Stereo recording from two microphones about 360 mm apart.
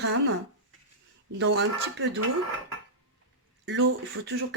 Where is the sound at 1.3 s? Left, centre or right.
Right.